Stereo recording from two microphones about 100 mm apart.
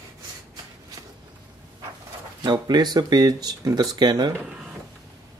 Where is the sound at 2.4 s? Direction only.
45° right (ahead or behind).